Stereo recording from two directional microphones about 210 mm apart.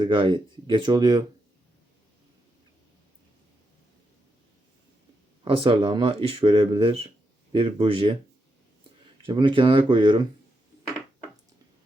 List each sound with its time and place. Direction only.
0.0 s speech: 25° right (ahead or behind)
5.5 s speech: 25° right (ahead or behind)
9.2 s speech: 25° right (ahead or behind)